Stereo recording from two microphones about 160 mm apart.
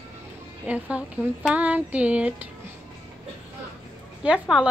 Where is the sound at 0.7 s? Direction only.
5° right (ahead or behind).